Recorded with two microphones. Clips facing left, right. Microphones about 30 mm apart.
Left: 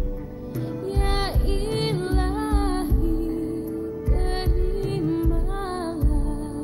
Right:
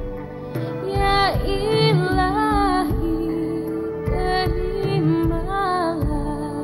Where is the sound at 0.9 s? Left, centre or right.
Right.